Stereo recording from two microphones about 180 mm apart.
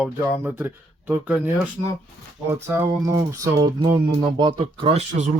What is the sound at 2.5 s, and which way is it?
Speech, 15° right (ahead or behind).